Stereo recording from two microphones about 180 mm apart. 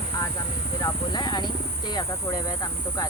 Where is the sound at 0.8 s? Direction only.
25° left (ahead or behind).